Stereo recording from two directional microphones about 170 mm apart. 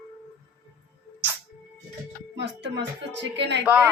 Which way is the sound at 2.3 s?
90° right.